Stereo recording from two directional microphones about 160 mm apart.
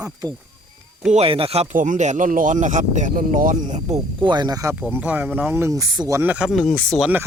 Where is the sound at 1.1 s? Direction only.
35° right (ahead or behind).